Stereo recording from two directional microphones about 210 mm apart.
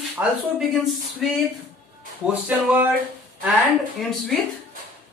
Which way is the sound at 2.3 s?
10° right (ahead or behind).